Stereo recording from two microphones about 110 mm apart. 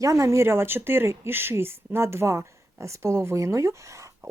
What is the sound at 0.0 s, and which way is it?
Speech, 30° right (ahead or behind).